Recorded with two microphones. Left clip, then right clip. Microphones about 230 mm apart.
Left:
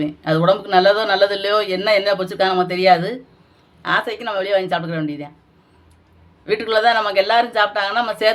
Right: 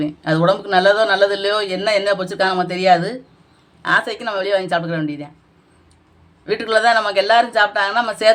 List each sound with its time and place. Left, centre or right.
0.0 s speech: centre
6.4 s speech: centre